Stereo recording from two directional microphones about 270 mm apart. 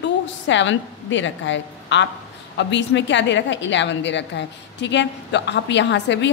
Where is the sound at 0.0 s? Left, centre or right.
Left.